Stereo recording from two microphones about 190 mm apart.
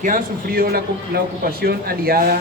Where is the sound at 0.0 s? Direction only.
45° right (ahead or behind).